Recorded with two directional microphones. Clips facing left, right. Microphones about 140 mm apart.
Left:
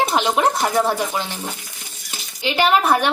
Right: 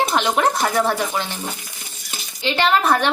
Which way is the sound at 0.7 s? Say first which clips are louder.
Left 1 dB; 35° left (ahead or behind).